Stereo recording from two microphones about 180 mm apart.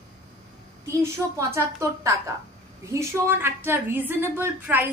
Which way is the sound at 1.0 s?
15° right (ahead or behind).